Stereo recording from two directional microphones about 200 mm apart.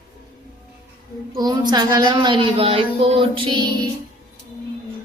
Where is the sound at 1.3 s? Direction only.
20° right (ahead or behind).